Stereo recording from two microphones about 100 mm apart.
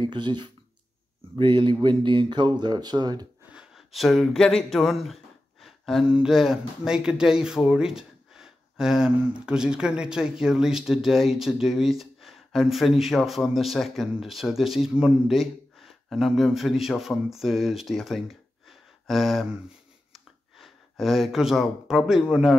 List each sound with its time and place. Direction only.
0.0 s speech: 50° right (ahead or behind)
3.5 s a sound: centre (ahead or behind)
6.0 s speech: 5° right (ahead or behind)